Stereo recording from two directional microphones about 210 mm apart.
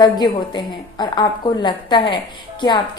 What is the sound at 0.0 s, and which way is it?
A woman's voice, 20° left (ahead or behind).